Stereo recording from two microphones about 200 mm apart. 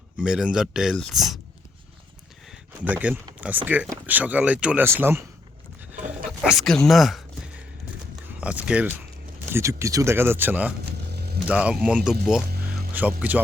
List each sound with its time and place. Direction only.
0.2 s speech: 5° right (ahead or behind)
2.5 s a sound: 5° right (ahead or behind)
3.4 s speech: 10° right (ahead or behind)
6.4 s a sound: centre (ahead or behind)
8.4 s speech: 5° right (ahead or behind)
11.1 s vehicle: 55° right (ahead or behind)
11.4 s speech: 5° right (ahead or behind)
12.5 s music: 50° right (ahead or behind)
12.9 s speech: 10° right (ahead or behind)